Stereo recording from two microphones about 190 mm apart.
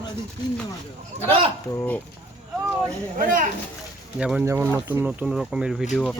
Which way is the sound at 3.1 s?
45° right (ahead or behind).